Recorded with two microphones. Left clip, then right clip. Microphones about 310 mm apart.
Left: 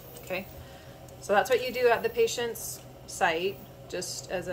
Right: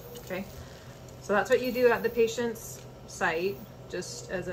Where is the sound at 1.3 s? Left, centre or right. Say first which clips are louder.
Left 1 dB; left.